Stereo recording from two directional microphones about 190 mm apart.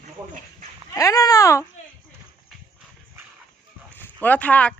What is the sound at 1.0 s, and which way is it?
Speech, 20° left (ahead or behind).